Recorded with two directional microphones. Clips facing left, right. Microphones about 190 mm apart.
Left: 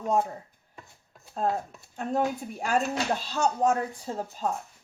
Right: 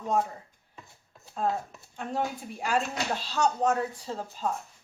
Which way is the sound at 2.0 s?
45° left (ahead or behind).